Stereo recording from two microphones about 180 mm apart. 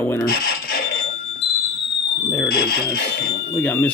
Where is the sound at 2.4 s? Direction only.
55° left (ahead or behind).